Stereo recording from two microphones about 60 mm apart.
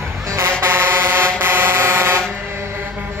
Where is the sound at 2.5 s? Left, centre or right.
Right.